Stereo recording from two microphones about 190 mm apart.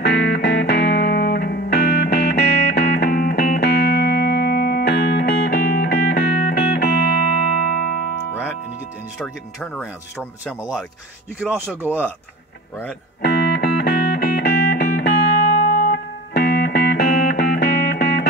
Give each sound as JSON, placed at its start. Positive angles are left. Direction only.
{"t": 0.0, "sound": "music", "side_deg": 60}
{"t": 10.6, "sound": "speech", "side_deg": 0}
{"t": 13.2, "sound": "music", "side_deg": 60}